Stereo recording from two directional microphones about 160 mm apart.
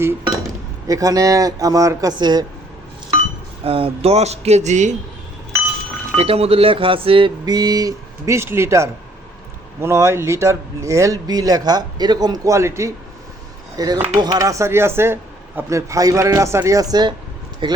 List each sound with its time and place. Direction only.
0.9 s speech: 20° right (ahead or behind)
3.6 s speech: 35° right (ahead or behind)
6.1 s speech: 40° right (ahead or behind)